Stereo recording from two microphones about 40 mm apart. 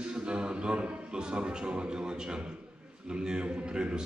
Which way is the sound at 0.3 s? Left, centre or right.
Right.